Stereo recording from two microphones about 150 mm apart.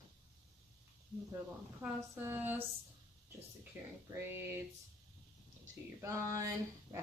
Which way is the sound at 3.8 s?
15° right (ahead or behind).